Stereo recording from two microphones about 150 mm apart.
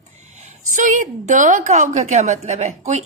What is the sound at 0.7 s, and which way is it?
A woman's voice, 55° right (ahead or behind).